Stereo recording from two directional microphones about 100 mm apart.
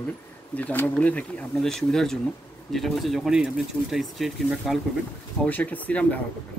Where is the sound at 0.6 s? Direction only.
15° left (ahead or behind); by 4.7 s centre (ahead or behind).